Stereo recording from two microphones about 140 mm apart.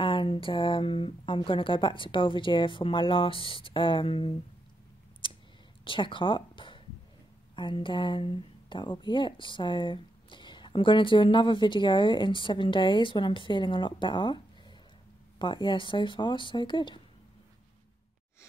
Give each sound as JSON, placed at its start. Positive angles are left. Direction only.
{"t": 0.0, "sound": "a woman's voice", "side_deg": 35}
{"t": 5.2, "sound": "a sound", "side_deg": 35}
{"t": 5.9, "sound": "a woman's voice", "side_deg": 35}